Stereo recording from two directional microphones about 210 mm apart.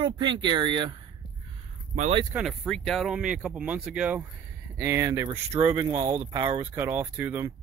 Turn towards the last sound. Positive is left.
turn(degrees=-10)  # may be behind; listen again after turning